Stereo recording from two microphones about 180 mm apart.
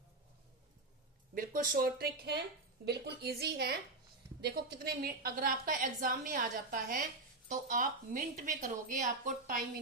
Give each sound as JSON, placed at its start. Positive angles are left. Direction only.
{"t": 1.4, "sound": "a woman's voice", "side_deg": -50}